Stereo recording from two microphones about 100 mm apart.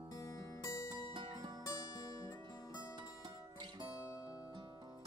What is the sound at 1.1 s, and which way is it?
Music, 50° right (ahead or behind).